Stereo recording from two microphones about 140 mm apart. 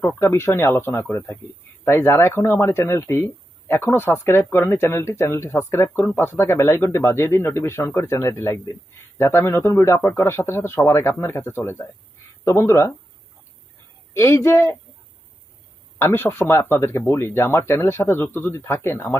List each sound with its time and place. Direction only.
0.2 s a man's voice: 20° left (ahead or behind)
14.1 s speech: 20° left (ahead or behind)
16.0 s speech: 15° left (ahead or behind)